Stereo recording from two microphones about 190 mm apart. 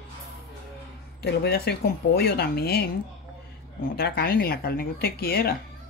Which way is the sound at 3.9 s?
55° left (ahead or behind).